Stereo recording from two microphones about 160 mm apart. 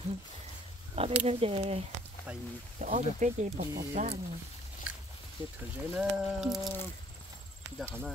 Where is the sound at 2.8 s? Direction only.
50° right (ahead or behind).